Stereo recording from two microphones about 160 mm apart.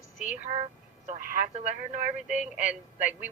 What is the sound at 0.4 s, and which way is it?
Speech, 45° right (ahead or behind).